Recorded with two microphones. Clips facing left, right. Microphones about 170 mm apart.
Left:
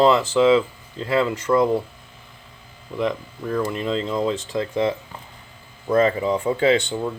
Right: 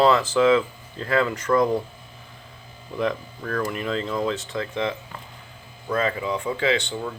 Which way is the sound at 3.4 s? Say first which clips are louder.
Left 5 dB; 15° left (ahead or behind).